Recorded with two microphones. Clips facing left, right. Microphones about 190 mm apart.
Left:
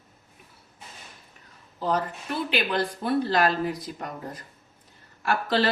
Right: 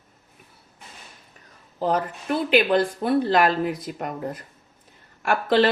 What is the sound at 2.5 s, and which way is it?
Speech, 50° right (ahead or behind).